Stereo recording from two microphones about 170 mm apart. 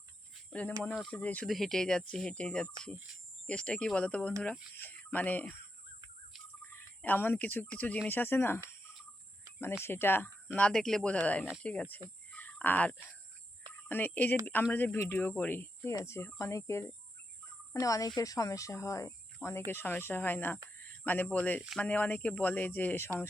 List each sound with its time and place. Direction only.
1.1 s speech: 10° left (ahead or behind)
6.7 s speech: 10° left (ahead or behind)
9.8 s speech: 15° left (ahead or behind)
12.3 s fowl: 10° left (ahead or behind)
13.8 s speech: 10° left (ahead or behind)